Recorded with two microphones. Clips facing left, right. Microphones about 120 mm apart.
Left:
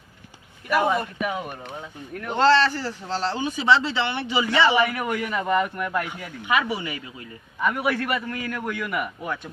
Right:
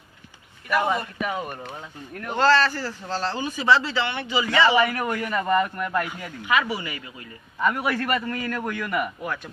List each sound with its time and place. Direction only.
0.7 s a man's voice: 5° left (ahead or behind)
2.6 s speech: 15° left (ahead or behind)
4.6 s a man's voice: centre (ahead or behind)
6.1 s speech: 15° left (ahead or behind)
7.6 s a man's voice: centre (ahead or behind)
9.2 s speech: 20° left (ahead or behind)